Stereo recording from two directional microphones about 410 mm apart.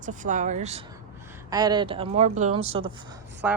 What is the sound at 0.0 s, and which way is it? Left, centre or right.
A woman's voice, centre.